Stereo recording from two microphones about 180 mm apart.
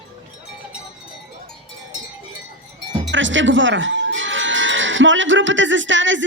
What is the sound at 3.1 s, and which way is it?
Music, 90° right.